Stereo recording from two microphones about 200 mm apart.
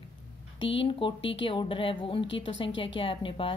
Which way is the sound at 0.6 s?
25° left (ahead or behind).